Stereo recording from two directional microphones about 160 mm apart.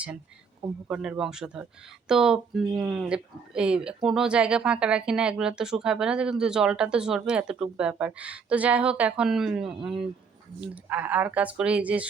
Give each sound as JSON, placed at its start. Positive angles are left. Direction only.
{"t": 0.9, "sound": "speech", "side_deg": -5}